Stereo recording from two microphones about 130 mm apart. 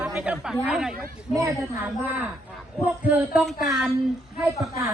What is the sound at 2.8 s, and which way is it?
Speech, 10° right (ahead or behind).